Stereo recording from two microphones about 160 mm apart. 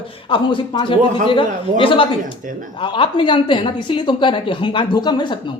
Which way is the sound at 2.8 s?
30° left (ahead or behind).